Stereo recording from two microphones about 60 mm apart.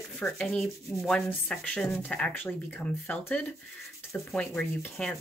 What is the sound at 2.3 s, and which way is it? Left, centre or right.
Speech, left.